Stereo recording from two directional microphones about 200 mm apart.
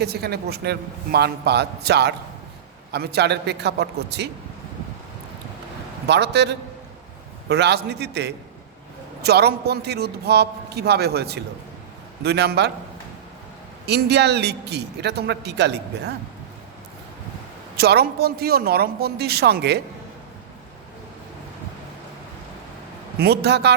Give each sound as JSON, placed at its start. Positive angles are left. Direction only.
{"t": 0.0, "sound": "a man's voice", "side_deg": -55}
{"t": 6.1, "sound": "a man's voice", "side_deg": -60}
{"t": 13.8, "sound": "a man's voice", "side_deg": -55}
{"t": 17.7, "sound": "a man's voice", "side_deg": -55}
{"t": 23.2, "sound": "a man's voice", "side_deg": -55}